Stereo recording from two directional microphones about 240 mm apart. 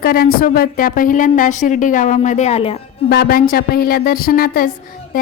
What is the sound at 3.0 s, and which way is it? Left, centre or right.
A woman's voice, left.